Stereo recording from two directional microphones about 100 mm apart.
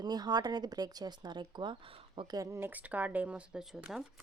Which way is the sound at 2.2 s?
35° right (ahead or behind).